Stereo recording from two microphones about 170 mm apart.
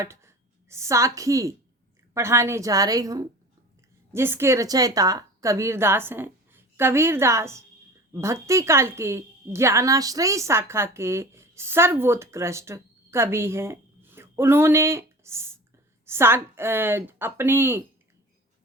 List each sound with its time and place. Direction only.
0.0 s a woman's voice: 15° right (ahead or behind)